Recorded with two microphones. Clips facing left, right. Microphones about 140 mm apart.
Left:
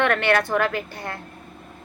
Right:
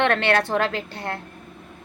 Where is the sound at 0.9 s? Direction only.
60° right (ahead or behind).